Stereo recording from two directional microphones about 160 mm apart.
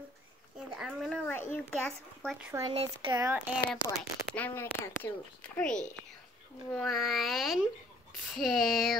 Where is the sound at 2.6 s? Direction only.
30° right (ahead or behind).